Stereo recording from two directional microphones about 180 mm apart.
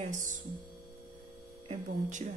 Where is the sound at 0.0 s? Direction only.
45° right (ahead or behind).